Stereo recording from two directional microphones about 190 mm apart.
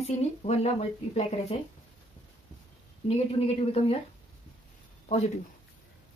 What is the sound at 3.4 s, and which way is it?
Speech, 35° left (ahead or behind).